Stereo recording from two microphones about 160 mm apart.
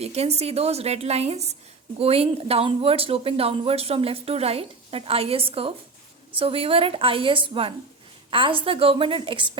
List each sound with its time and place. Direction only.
0.0 s speech: 40° right (ahead or behind)